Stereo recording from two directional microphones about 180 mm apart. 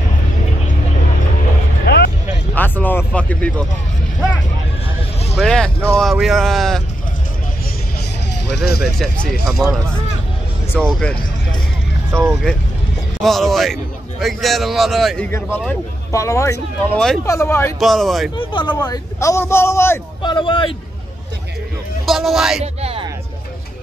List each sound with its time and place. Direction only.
1.9 s vehicle: 70° left (ahead or behind)
2.5 s speech: 10° left (ahead or behind)
5.4 s a man's voice: 5° left (ahead or behind)
8.5 s speech: 60° left (ahead or behind)
8.9 s a man's voice: centre (ahead or behind)
12.1 s speech: 15° right (ahead or behind)
13.2 s a man's voice: centre (ahead or behind)
17.7 s a man's voice: centre (ahead or behind)
18.3 s a man's voice: 25° left (ahead or behind)
20.2 s a man's voice: 25° left (ahead or behind)
22.0 s a man's voice: centre (ahead or behind)
22.8 s speech: 35° right (ahead or behind)